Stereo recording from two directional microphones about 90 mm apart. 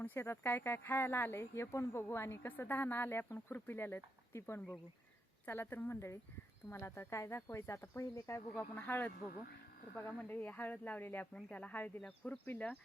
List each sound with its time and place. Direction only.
0.0 s speech: 25° left (ahead or behind)
10.2 s speech: 20° left (ahead or behind)